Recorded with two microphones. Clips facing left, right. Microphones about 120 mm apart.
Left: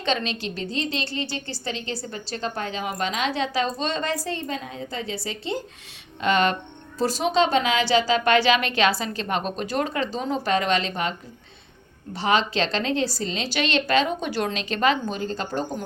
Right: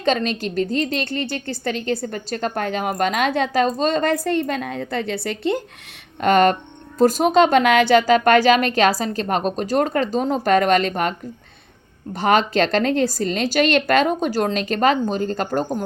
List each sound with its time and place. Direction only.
0.0 s a woman's voice: 45° right (ahead or behind)
12.1 s a woman's voice: 50° right (ahead or behind)